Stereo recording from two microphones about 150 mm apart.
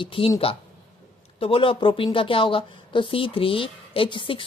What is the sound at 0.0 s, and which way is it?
Speech, 35° left (ahead or behind).